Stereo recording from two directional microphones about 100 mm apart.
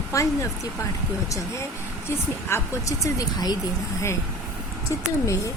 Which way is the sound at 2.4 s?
30° left (ahead or behind).